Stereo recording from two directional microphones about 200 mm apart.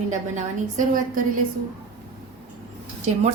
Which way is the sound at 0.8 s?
45° right (ahead or behind).